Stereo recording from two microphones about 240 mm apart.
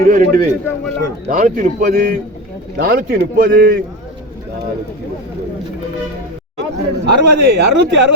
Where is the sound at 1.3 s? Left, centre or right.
Right.